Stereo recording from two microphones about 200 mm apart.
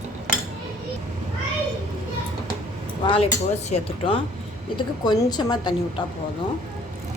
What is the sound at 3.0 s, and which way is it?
Speech, 30° left (ahead or behind).